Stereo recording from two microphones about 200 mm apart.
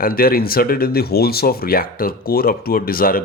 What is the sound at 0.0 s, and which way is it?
Speech, 45° left (ahead or behind).